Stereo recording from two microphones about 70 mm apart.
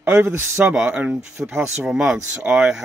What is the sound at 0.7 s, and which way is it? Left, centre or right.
Speech, centre.